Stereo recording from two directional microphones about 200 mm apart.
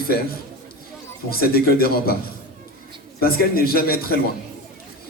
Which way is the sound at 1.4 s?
50° left (ahead or behind).